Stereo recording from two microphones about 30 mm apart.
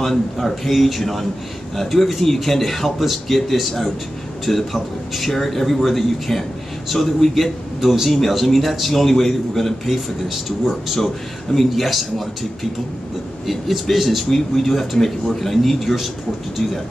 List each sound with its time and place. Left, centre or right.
0.0 s a man's voice: centre
9.9 s speech: centre
11.5 s speech: centre
13.5 s speech: centre